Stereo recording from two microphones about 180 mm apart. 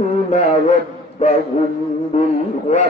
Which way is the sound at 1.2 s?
40° left (ahead or behind).